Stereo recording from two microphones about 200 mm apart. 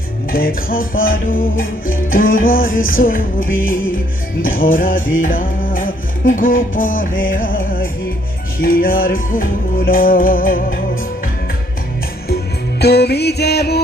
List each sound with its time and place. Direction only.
0.3 s music: 45° left (ahead or behind)
12.8 s music: 55° left (ahead or behind)